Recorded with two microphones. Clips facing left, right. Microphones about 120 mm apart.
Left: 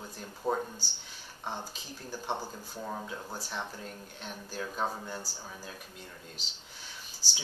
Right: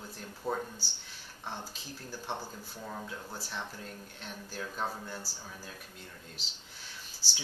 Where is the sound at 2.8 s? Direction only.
15° left (ahead or behind).